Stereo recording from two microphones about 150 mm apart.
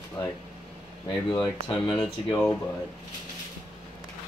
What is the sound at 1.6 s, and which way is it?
Speech, 30° left (ahead or behind).